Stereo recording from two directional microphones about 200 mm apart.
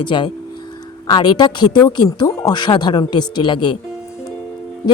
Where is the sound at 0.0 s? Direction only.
25° left (ahead or behind).